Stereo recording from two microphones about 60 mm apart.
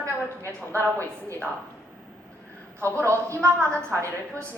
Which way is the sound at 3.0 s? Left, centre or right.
Right.